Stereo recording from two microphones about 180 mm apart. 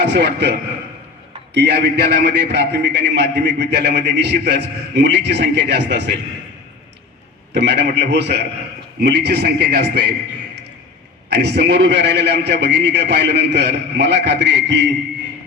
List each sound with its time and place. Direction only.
0.0 s a man's voice: 70° right (ahead or behind)
1.5 s a man's voice: 70° right (ahead or behind)
7.5 s a man's voice: 70° right (ahead or behind)
11.3 s a man's voice: 70° right (ahead or behind)